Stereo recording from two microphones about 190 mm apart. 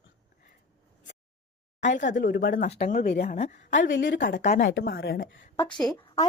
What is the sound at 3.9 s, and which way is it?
Speech, 75° left (ahead or behind).